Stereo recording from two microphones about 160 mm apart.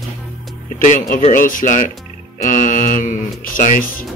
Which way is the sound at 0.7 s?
55° left (ahead or behind).